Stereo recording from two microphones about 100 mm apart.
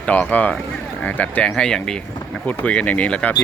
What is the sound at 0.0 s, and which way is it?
Speech, 15° left (ahead or behind).